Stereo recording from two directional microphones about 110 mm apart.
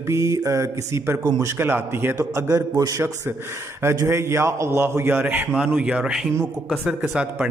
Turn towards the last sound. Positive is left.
turn(degrees=-10)  # may be behind; listen again after turning